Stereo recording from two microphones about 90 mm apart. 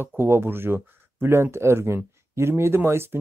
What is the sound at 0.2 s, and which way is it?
Speech, 25° right (ahead or behind).